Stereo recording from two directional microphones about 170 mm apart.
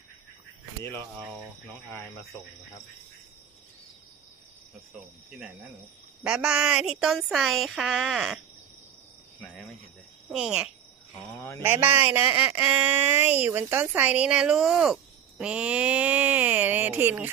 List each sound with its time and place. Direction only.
0.8 s speech: 15° left (ahead or behind)
5.3 s speech: centre (ahead or behind)
10.2 s speech: 5° right (ahead or behind)